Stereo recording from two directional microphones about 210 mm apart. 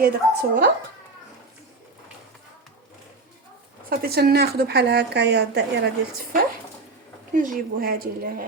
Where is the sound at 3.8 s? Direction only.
45° right (ahead or behind).